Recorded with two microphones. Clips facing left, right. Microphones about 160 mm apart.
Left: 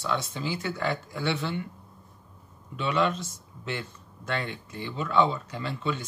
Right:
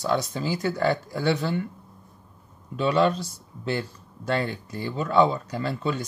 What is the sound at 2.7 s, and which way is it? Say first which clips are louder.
Speech: right 5 dB; 35° right (ahead or behind).